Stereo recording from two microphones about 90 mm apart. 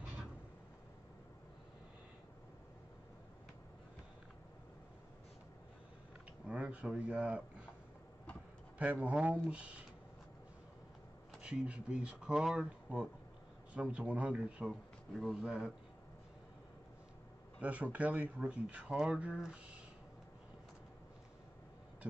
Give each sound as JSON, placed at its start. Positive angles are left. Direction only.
{"t": 6.4, "sound": "speech", "side_deg": -10}
{"t": 8.7, "sound": "speech", "side_deg": -15}
{"t": 11.4, "sound": "speech", "side_deg": -15}
{"t": 12.9, "sound": "speech", "side_deg": -15}
{"t": 17.6, "sound": "speech", "side_deg": -15}